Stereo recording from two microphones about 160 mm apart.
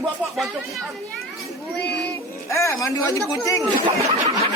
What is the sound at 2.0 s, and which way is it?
Speech, 20° left (ahead or behind).